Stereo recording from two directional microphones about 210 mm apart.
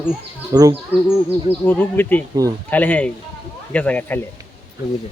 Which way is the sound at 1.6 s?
10° left (ahead or behind).